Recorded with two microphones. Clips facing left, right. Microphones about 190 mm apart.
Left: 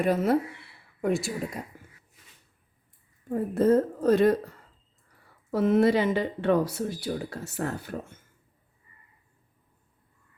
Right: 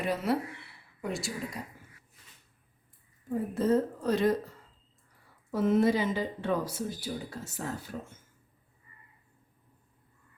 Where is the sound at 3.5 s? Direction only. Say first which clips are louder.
Left 5 dB; 50° left (ahead or behind).